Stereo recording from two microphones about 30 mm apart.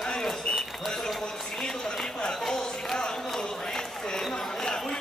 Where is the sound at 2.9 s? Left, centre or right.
Left.